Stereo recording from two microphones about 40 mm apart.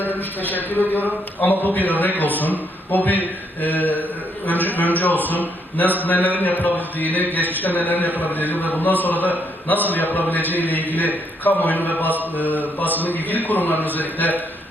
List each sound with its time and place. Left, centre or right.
0.0 s a man's voice: left